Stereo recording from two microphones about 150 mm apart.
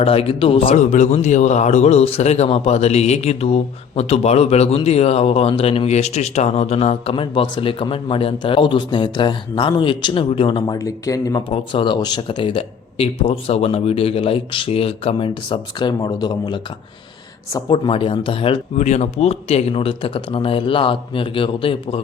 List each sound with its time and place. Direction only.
0.0 s speech: 40° left (ahead or behind)
0.8 s a man's voice: 55° left (ahead or behind); by 10.8 s 35° left (ahead or behind)
10.8 s a man's voice: 20° left (ahead or behind)
11.4 s speech: 35° left (ahead or behind)
17.7 s speech: 35° left (ahead or behind)